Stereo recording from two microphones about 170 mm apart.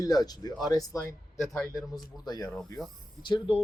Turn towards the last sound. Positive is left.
turn(degrees=30)  # may be behind; listen again after turning